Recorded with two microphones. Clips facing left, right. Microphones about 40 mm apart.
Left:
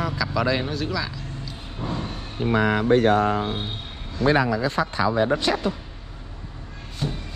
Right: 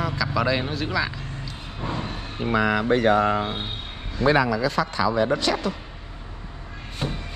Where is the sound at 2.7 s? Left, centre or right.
Right.